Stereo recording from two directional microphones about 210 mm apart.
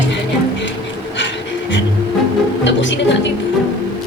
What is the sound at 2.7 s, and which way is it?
Music, 60° left (ahead or behind).